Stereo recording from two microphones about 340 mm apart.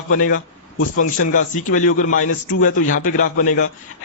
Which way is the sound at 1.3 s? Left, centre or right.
Left.